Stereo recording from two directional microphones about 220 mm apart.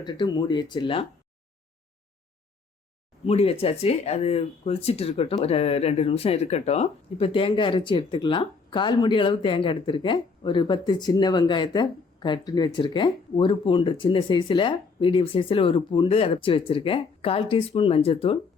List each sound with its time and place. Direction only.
0.0 s speech: 20° left (ahead or behind)
3.2 s speech: 25° left (ahead or behind)